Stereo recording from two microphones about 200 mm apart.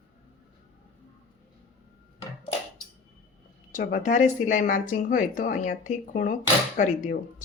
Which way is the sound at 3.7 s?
40° left (ahead or behind).